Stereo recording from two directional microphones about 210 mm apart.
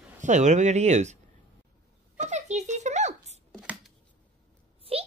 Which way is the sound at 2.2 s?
35° right (ahead or behind).